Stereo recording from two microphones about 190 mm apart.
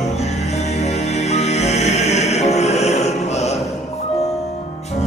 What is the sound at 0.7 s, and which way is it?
Music, 35° left (ahead or behind).